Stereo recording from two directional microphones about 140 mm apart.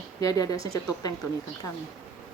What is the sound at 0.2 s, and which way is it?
Speech, 25° left (ahead or behind).